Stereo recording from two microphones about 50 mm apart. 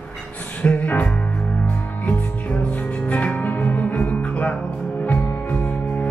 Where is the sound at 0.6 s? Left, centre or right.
Left.